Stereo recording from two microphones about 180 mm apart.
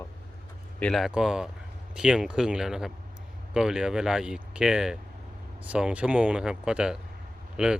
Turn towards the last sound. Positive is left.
turn(degrees=-5)  # may be behind; listen again after turning